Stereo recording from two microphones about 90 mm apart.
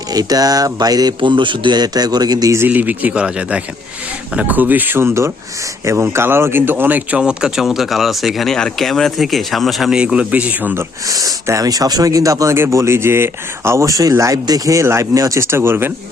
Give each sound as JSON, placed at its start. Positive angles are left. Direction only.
{"t": 0.1, "sound": "a man's voice", "side_deg": -45}
{"t": 1.2, "sound": "a man's voice", "side_deg": -65}
{"t": 2.6, "sound": "speech", "side_deg": -20}
{"t": 11.0, "sound": "speech", "side_deg": -45}